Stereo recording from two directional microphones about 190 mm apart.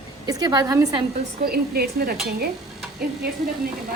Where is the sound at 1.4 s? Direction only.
55° right (ahead or behind).